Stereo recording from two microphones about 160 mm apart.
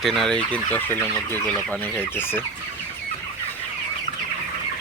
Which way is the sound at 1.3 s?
15° left (ahead or behind).